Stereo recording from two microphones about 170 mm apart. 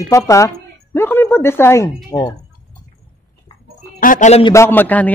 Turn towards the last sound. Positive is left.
turn(degrees=10)  # may be behind; listen again after turning